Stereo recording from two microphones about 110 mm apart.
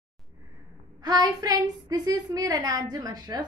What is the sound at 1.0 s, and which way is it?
A woman's voice, 35° right (ahead or behind).